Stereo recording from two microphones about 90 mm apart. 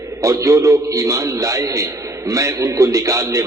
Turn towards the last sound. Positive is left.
turn(degrees=-35)  # may be behind; listen again after turning